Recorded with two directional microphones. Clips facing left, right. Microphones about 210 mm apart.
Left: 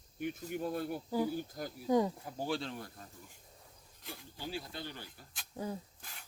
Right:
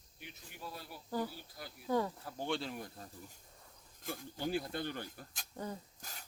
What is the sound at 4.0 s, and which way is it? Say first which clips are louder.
Speech: right 6 dB; 45° right (ahead or behind).